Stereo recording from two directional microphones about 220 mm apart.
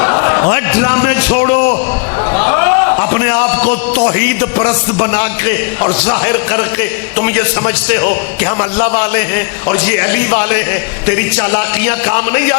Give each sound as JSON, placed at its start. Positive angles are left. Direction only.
{"t": 0.0, "sound": "a man's voice", "side_deg": 20}
{"t": 2.5, "sound": "a sound", "side_deg": 20}
{"t": 4.1, "sound": "a man's voice", "side_deg": 10}